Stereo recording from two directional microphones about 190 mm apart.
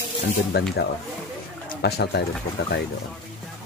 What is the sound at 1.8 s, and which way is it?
Speech, 60° left (ahead or behind).